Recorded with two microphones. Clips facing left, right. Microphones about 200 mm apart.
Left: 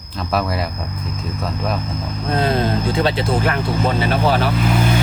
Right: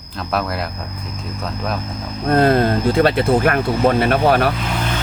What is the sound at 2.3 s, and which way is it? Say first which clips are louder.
Speech: right 5 dB; 55° right (ahead or behind).